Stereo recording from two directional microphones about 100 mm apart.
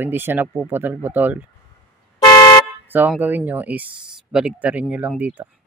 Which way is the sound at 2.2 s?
35° left (ahead or behind).